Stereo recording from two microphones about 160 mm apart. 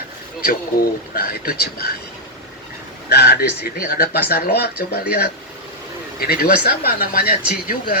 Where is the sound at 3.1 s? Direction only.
90° left.